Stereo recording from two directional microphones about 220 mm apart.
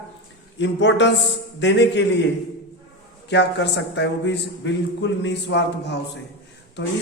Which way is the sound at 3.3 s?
50° left (ahead or behind).